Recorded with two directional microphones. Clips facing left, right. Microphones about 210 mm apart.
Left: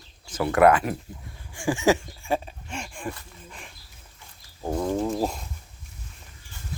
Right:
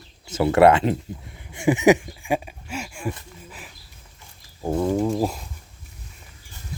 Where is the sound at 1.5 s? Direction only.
20° right (ahead or behind).